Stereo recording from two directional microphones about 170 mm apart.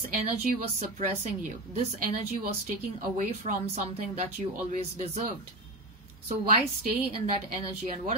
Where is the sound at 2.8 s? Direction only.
55° right (ahead or behind).